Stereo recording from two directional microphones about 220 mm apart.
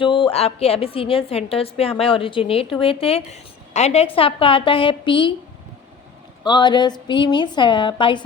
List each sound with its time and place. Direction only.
0.0 s a woman's voice: 20° left (ahead or behind)
6.4 s a woman's voice: 20° left (ahead or behind)